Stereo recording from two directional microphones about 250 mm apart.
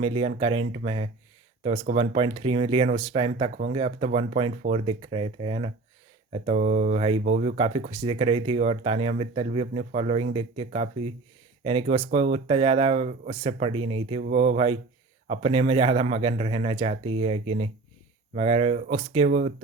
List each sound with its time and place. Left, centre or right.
0.0 s speech: right